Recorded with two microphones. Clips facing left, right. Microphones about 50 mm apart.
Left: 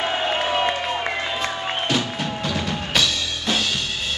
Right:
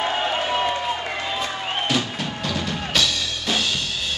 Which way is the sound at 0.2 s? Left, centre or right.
Centre.